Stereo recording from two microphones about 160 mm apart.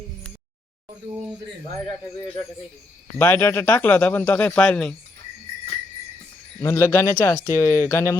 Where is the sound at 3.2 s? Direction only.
15° left (ahead or behind).